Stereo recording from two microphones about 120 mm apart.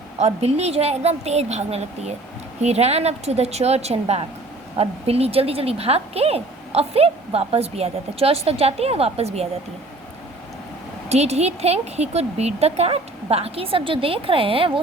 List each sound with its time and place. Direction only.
0.2 s speech: 60° right (ahead or behind)
11.1 s a woman's voice: 65° right (ahead or behind)